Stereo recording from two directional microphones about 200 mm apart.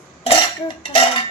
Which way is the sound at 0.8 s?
25° left (ahead or behind).